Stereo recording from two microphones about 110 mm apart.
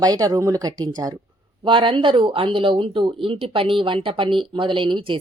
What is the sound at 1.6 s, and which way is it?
Speech, 50° right (ahead or behind).